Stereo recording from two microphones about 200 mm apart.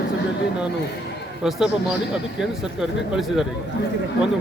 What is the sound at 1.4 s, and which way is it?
Speech, centre (ahead or behind).